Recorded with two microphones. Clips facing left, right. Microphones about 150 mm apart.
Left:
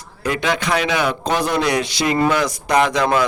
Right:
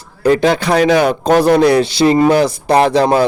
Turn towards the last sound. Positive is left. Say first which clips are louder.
# right 5 dB
turn(degrees=-30)  # may be behind; listen again after turning